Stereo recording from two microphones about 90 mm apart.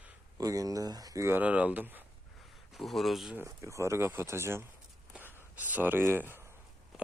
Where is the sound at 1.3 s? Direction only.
15° right (ahead or behind).